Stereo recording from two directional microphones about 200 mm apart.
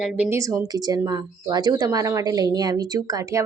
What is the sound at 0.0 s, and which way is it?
A woman's voice, 5° right (ahead or behind).